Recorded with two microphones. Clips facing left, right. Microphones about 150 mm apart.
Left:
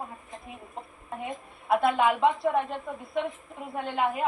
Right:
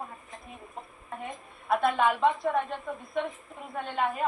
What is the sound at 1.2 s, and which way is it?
A woman's voice, 10° left (ahead or behind).